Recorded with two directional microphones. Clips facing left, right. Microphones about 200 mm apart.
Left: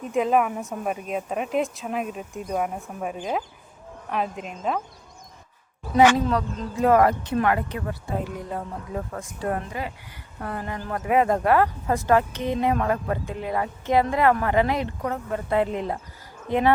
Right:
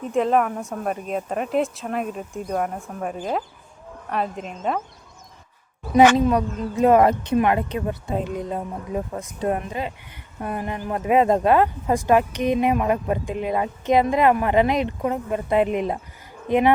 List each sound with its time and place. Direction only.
0.0 s speech: 5° left (ahead or behind)
6.1 s a woman's voice: 15° right (ahead or behind)